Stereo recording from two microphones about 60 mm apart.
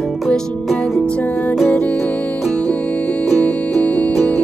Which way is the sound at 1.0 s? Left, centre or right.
Centre.